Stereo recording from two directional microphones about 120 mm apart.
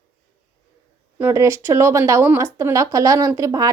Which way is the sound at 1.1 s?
20° right (ahead or behind).